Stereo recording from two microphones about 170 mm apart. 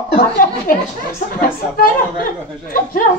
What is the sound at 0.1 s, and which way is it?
Speech, 55° left (ahead or behind).